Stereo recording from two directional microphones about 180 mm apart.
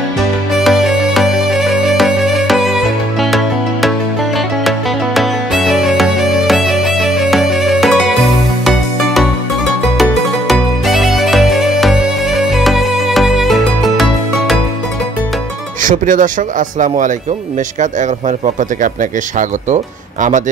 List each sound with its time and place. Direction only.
0.6 s music: centre (ahead or behind)
15.8 s speech: 45° right (ahead or behind)